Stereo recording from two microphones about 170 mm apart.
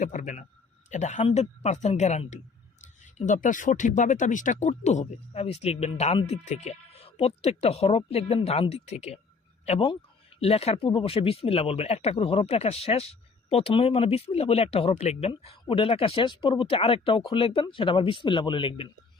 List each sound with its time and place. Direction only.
0.0 s speech: 45° left (ahead or behind); by 18.9 s 30° left (ahead or behind)